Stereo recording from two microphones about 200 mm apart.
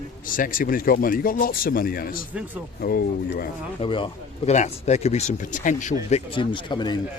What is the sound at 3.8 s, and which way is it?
Speech, 25° left (ahead or behind).